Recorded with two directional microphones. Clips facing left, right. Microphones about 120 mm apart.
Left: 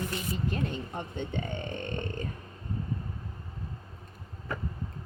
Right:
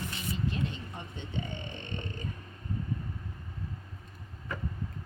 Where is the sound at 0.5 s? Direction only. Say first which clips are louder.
Left 3 dB; 50° left (ahead or behind).